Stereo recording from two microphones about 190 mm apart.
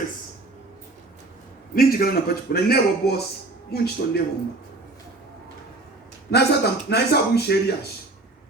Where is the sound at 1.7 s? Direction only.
50° left (ahead or behind).